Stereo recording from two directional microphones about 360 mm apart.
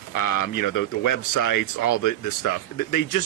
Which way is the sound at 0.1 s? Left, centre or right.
Left.